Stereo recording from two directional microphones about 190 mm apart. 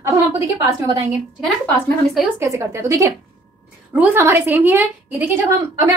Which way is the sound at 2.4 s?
15° right (ahead or behind).